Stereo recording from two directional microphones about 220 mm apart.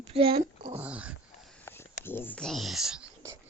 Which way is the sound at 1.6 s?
10° left (ahead or behind).